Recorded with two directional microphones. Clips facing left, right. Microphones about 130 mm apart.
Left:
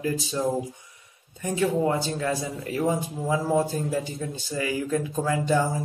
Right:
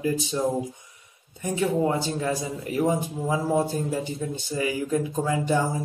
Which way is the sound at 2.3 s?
20° right (ahead or behind).